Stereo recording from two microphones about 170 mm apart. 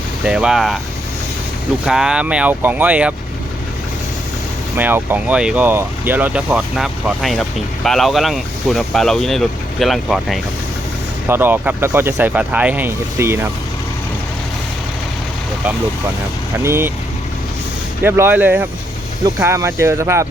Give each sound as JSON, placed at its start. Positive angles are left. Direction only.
{"t": 0.3, "sound": "speech", "side_deg": -5}
{"t": 1.8, "sound": "speech", "side_deg": -5}
{"t": 4.8, "sound": "speech", "side_deg": -10}
{"t": 11.3, "sound": "speech", "side_deg": -10}
{"t": 16.6, "sound": "speech", "side_deg": -15}
{"t": 18.0, "sound": "speech", "side_deg": -10}